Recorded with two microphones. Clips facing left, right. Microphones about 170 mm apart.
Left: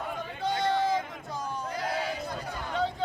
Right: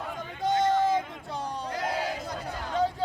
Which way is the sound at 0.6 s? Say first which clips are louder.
Right 3 dB; 45° right (ahead or behind).